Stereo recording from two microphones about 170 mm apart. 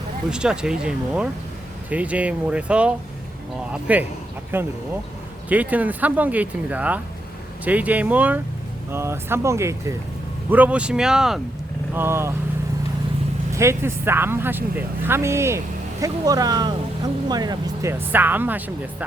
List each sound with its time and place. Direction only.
0.3 s speech: 5° right (ahead or behind)
11.9 s speech: 15° right (ahead or behind)
13.5 s speech: 15° right (ahead or behind)
18.1 s speech: 10° right (ahead or behind)